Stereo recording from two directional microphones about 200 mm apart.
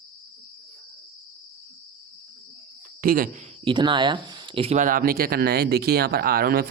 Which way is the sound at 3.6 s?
25° right (ahead or behind).